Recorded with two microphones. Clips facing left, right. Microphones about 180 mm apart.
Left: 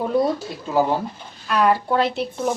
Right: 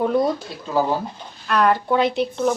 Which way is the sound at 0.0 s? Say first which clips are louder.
Right 1 dB; 5° left (ahead or behind).